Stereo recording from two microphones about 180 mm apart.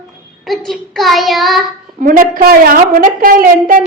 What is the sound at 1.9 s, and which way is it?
A woman's voice, 50° right (ahead or behind).